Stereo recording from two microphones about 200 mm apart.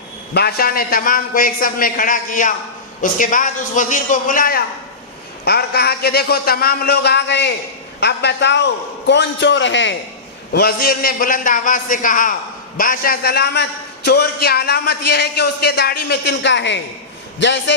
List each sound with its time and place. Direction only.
0.3 s a man's voice: 50° left (ahead or behind)
10.5 s a man's voice: 50° left (ahead or behind)